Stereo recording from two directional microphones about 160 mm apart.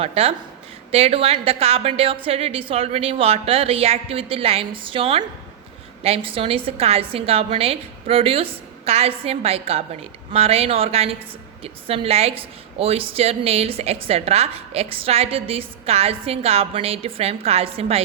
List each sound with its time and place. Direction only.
0.0 s a woman's voice: 35° right (ahead or behind)